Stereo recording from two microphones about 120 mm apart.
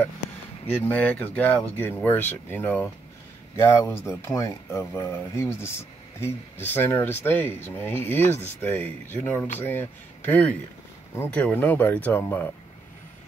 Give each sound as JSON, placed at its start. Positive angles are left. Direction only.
{"t": 0.8, "sound": "speech", "side_deg": 15}